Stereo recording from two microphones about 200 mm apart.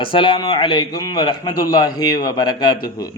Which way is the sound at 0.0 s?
25° left (ahead or behind).